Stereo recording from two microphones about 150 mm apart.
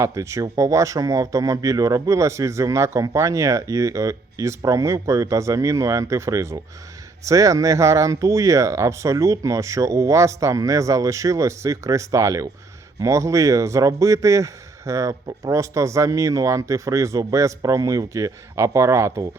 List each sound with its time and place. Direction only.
0.0 s speech: 20° right (ahead or behind)